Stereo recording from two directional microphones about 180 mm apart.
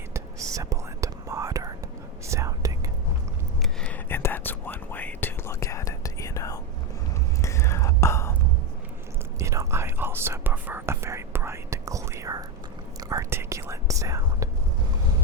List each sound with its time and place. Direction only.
0.1 s whispering: 15° right (ahead or behind)
3.6 s whispering: 5° left (ahead or behind)
9.4 s whispering: 15° right (ahead or behind)